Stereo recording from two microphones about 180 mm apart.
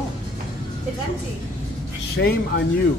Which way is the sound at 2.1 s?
65° left (ahead or behind).